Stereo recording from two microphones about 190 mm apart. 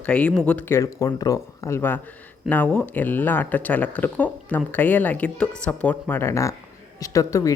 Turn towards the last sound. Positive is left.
turn(degrees=15)  # may be behind; listen again after turning